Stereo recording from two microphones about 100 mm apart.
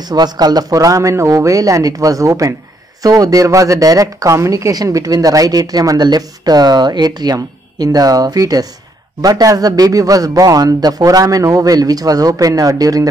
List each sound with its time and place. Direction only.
0.1 s speech: 40° right (ahead or behind)